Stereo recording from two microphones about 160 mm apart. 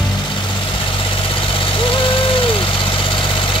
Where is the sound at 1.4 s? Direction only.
35° left (ahead or behind).